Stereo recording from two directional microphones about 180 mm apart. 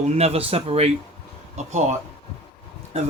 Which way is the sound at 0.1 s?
35° right (ahead or behind).